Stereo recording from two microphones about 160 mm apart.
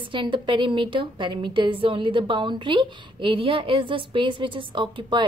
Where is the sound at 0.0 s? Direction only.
30° right (ahead or behind).